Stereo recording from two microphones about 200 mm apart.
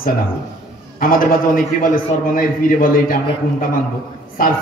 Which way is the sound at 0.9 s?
45° left (ahead or behind).